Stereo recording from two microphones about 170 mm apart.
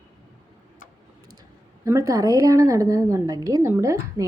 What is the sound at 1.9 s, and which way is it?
A woman's voice, 20° right (ahead or behind).